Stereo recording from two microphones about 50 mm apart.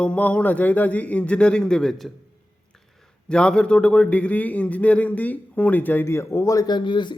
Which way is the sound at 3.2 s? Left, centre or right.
Centre.